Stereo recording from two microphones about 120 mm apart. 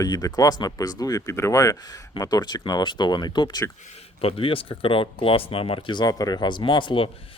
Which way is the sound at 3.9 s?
50° left (ahead or behind).